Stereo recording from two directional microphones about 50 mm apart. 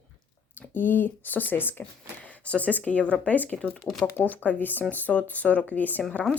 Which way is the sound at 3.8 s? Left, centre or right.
Centre.